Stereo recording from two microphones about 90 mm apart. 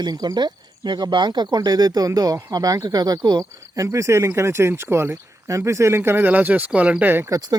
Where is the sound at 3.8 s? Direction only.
35° right (ahead or behind).